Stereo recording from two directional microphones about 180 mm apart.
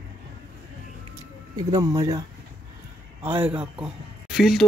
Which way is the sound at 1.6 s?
20° right (ahead or behind).